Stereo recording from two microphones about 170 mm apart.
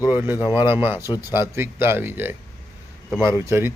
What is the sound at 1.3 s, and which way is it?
A man's voice, 15° right (ahead or behind).